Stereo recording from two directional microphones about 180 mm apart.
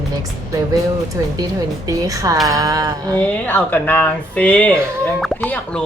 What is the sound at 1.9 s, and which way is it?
A woman's voice, 20° right (ahead or behind).